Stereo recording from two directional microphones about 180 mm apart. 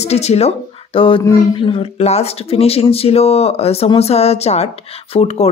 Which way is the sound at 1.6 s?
30° left (ahead or behind).